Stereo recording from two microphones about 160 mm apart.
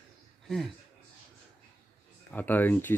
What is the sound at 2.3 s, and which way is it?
Speech, 10° left (ahead or behind).